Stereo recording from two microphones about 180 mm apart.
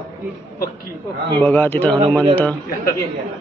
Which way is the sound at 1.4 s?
10° left (ahead or behind).